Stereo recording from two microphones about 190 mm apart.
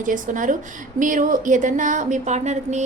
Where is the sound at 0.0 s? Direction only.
45° right (ahead or behind).